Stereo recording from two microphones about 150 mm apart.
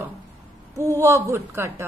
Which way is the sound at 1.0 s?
15° right (ahead or behind).